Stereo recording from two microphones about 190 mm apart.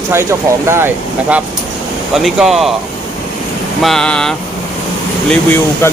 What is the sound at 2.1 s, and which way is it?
Speech, centre (ahead or behind).